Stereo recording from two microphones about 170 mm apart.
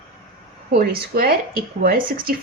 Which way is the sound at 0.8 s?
60° right (ahead or behind).